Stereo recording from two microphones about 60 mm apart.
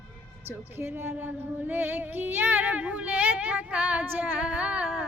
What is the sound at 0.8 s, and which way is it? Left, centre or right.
Child singing, right.